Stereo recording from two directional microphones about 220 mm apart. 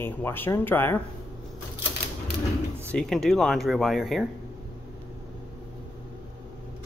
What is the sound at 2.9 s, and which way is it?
Speech, 5° left (ahead or behind).